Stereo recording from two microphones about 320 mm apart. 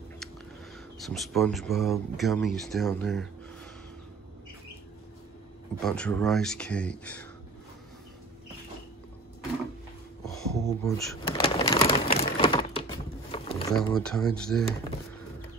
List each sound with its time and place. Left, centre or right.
0.9 s speech: centre
5.8 s speech: centre
10.2 s a sound: centre
13.7 s speech: centre